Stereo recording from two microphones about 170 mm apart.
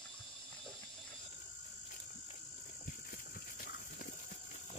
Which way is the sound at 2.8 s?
55° left (ahead or behind).